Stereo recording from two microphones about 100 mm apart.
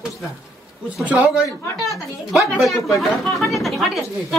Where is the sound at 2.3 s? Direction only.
Centre (ahead or behind).